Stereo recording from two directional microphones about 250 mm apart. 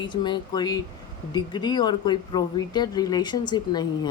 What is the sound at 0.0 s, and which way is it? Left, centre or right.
Speech, centre.